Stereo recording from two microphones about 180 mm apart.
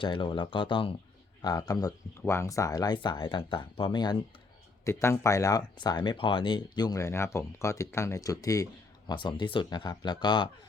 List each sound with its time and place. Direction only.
0.0 s speech: 25° left (ahead or behind)